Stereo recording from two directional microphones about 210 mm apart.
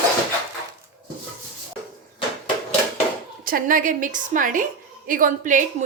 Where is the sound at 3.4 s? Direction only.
40° right (ahead or behind).